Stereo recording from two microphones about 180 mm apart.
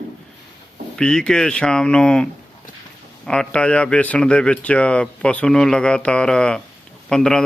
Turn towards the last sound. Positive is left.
turn(degrees=5)  # may be behind; listen again after turning